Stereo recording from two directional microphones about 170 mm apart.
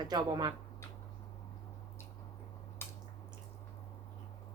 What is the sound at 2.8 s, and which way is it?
Drip, 15° left (ahead or behind).